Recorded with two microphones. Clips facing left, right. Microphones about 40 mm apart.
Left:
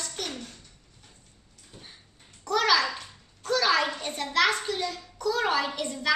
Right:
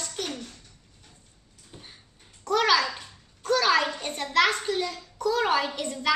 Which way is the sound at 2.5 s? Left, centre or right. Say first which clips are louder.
Right 1 dB; right.